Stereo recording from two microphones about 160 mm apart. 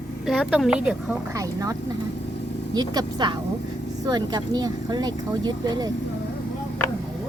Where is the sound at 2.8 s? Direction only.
25° right (ahead or behind).